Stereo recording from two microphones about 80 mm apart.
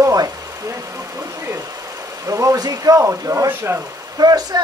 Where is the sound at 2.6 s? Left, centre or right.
Right.